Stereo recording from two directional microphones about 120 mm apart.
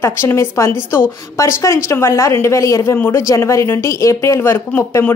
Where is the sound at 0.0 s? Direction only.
20° left (ahead or behind).